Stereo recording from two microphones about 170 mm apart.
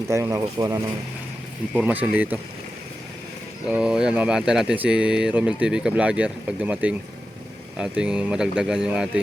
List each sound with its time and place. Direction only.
0.1 s speech: 15° right (ahead or behind)
3.7 s speech: 5° right (ahead or behind)